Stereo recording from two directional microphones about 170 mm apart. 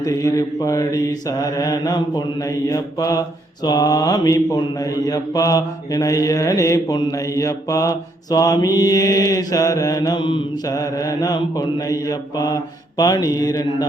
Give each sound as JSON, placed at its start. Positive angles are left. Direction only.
{"t": 0.0, "sound": "mantra", "side_deg": 20}